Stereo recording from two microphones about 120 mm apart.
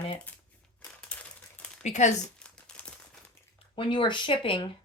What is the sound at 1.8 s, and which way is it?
Speech, 75° left (ahead or behind).